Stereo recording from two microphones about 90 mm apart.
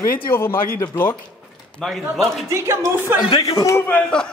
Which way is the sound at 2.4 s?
30° right (ahead or behind).